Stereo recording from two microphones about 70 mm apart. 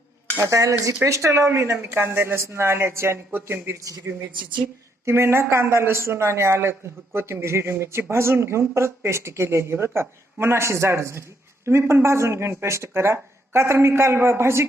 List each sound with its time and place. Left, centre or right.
0.4 s speech: right